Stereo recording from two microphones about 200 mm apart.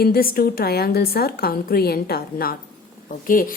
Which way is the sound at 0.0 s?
50° left (ahead or behind).